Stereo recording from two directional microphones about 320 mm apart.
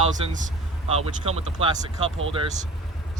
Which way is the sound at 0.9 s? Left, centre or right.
Centre.